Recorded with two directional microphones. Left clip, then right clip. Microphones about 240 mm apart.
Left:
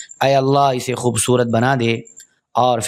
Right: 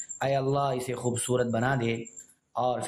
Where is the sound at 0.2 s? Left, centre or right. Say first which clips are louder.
Left 13 dB; left.